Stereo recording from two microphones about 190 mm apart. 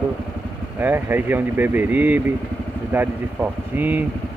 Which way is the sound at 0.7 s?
10° right (ahead or behind).